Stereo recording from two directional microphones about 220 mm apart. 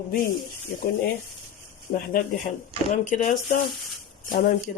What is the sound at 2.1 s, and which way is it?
Speech, 40° left (ahead or behind).